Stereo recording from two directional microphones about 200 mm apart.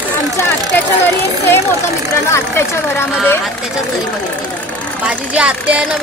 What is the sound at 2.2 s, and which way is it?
Speech, 15° left (ahead or behind).